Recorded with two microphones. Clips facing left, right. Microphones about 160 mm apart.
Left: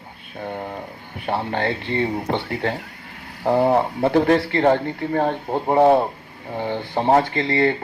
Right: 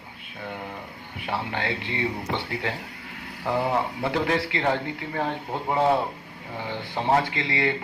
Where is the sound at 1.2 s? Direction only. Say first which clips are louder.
Left 6 dB; 55° left (ahead or behind).